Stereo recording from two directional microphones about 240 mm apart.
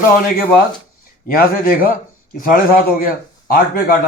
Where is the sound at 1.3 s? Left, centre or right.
Left.